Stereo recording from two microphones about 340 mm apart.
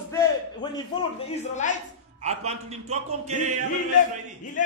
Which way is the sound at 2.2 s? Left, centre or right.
Centre.